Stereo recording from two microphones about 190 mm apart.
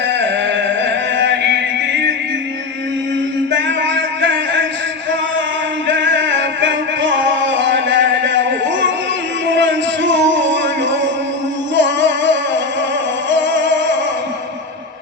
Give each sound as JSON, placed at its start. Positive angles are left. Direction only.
{"t": 0.1, "sound": "music", "side_deg": -70}
{"t": 3.5, "sound": "music", "side_deg": -70}
{"t": 5.9, "sound": "music", "side_deg": -70}